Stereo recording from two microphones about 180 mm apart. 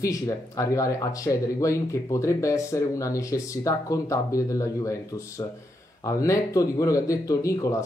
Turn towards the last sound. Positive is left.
turn(degrees=15)  # may be behind; listen again after turning